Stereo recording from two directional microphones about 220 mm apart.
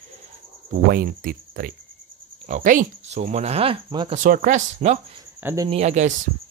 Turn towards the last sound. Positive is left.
turn(degrees=-30)  # may be behind; listen again after turning